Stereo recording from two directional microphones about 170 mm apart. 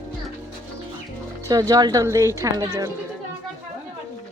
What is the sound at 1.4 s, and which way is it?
Speech, 20° right (ahead or behind).